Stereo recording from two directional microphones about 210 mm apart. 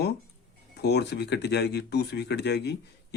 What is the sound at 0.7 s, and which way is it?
Speech, 50° left (ahead or behind).